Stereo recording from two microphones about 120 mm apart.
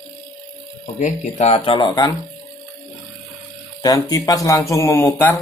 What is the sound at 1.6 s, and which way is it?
Speech, 45° left (ahead or behind).